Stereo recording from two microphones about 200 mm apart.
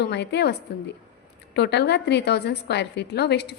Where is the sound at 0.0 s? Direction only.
60° left (ahead or behind).